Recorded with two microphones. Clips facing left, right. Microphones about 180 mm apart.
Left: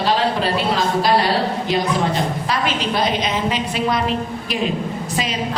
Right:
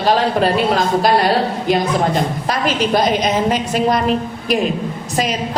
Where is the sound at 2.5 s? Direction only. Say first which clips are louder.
Right 7 dB; 45° right (ahead or behind).